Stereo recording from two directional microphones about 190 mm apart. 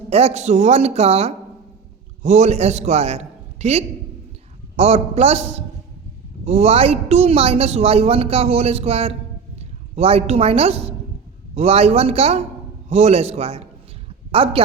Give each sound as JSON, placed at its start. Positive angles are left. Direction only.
{"t": 0.1, "sound": "a woman's voice", "side_deg": -35}